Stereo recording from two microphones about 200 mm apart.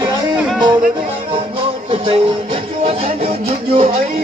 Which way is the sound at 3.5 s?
30° right (ahead or behind).